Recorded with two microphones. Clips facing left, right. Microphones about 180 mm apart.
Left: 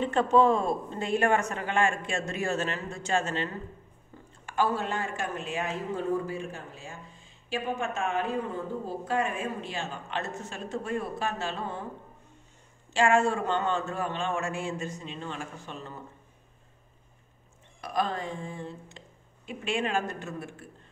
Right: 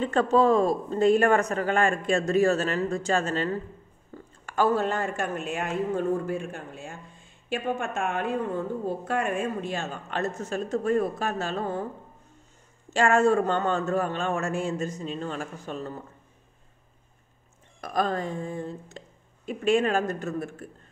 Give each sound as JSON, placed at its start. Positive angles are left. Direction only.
{"t": 0.0, "sound": "speech", "side_deg": -40}
{"t": 4.5, "sound": "speech", "side_deg": -45}
{"t": 12.9, "sound": "speech", "side_deg": -40}
{"t": 17.7, "sound": "speech", "side_deg": -45}